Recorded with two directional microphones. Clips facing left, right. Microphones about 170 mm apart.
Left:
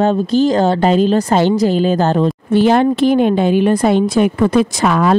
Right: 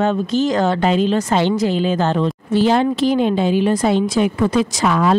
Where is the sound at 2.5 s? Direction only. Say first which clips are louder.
Left 3 dB; 55° left (ahead or behind).